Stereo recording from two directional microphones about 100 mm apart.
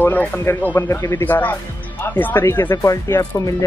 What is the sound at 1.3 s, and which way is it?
Speech, 20° left (ahead or behind).